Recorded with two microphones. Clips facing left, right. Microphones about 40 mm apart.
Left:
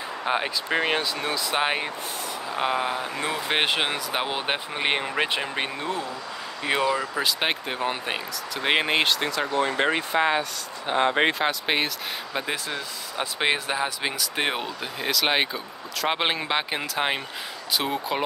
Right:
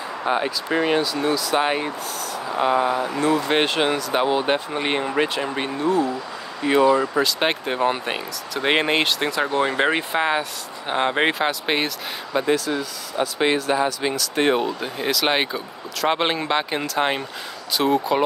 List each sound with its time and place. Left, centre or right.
0.3 s speech: left
1.6 s speech: centre
6.9 s speech: centre
12.5 s speech: left; by 18.2 s centre